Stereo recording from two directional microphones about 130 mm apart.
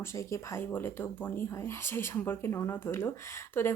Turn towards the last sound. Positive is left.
turn(degrees=20)  # may be behind; listen again after turning